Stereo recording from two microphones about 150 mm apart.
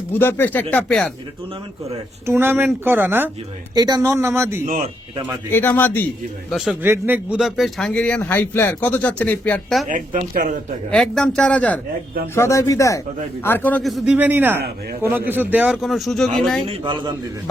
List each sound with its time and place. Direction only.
0.1 s speech: 15° left (ahead or behind)
2.2 s speech: 15° right (ahead or behind)
3.8 s speech: 25° right (ahead or behind)
4.6 s a woman's voice: 65° right (ahead or behind)
5.5 s speech: 15° left (ahead or behind)
6.8 s speech: 15° right (ahead or behind); by 9.8 s 5° left (ahead or behind)
9.9 s a woman's voice: 60° right (ahead or behind)
10.9 s speech: 5° left (ahead or behind)
13.8 s speech: centre (ahead or behind)
16.6 s a man's voice: 30° right (ahead or behind)